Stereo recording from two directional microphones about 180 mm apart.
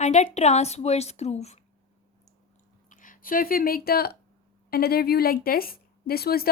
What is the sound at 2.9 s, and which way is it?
Speech, 45° left (ahead or behind).